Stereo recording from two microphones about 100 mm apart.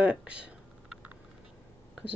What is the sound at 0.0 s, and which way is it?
Typing, 10° right (ahead or behind).